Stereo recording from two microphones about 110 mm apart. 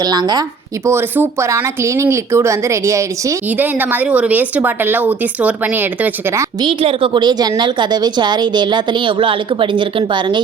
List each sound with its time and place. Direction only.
0.0 s speech: 40° right (ahead or behind)
0.9 s speech: 20° right (ahead or behind)
3.5 s speech: 15° right (ahead or behind)
6.6 s a woman's voice: 55° right (ahead or behind)